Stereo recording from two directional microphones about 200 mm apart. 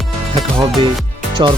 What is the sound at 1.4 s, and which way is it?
Speech, 25° right (ahead or behind).